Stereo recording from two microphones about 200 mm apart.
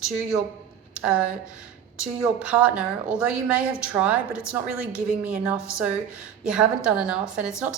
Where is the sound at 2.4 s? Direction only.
5° right (ahead or behind).